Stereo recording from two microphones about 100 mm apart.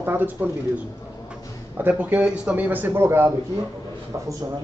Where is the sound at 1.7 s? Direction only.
20° right (ahead or behind).